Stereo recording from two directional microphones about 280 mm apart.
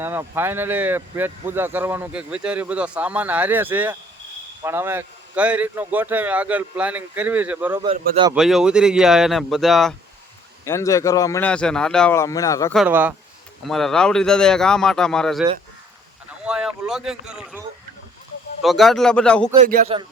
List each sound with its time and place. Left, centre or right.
0.0 s speech: centre
7.9 s a man's voice: centre
8.4 s speech: centre
10.7 s speech: centre
12.7 s speech: centre
16.5 s speech: centre
18.6 s speech: centre
19.5 s a man's voice: right